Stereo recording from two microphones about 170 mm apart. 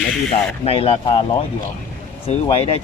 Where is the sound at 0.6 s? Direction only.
35° left (ahead or behind).